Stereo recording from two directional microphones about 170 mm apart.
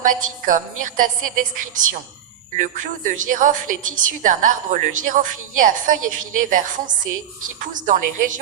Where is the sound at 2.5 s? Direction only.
50° right (ahead or behind).